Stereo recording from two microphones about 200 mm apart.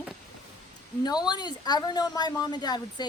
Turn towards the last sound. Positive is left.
turn(degrees=20)  # may be behind; listen again after turning